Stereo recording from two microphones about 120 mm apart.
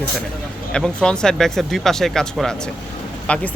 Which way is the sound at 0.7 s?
5° left (ahead or behind).